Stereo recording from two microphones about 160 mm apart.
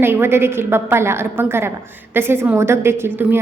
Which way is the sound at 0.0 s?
15° right (ahead or behind).